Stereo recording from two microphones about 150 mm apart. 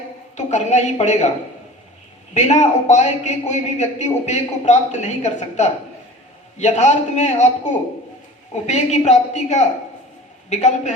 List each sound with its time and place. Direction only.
0.3 s a man's voice: 50° left (ahead or behind)
2.3 s a man's voice: 50° left (ahead or behind)
8.6 s a man's voice: 50° left (ahead or behind)